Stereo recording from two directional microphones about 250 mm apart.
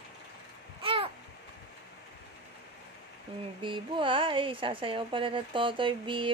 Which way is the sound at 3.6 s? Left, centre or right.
Centre.